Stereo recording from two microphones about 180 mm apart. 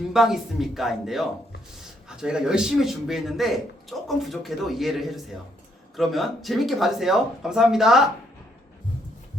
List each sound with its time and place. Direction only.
0.1 s a man's voice: centre (ahead or behind)